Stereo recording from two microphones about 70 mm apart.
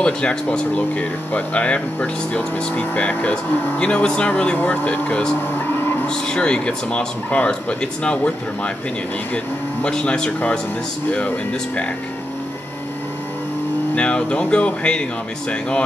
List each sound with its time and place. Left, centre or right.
0.0 s speech: centre
5.5 s vehicle: left
6.0 s speech: centre
13.9 s speech: centre